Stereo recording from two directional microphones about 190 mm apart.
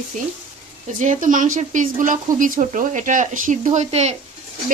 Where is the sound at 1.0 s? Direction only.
40° right (ahead or behind).